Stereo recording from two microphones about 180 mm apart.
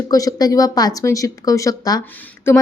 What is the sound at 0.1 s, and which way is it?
A woman's voice, 20° left (ahead or behind).